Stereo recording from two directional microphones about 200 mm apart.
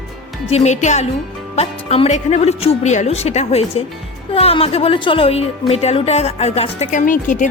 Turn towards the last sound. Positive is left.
turn(degrees=40)  # may be behind; listen again after turning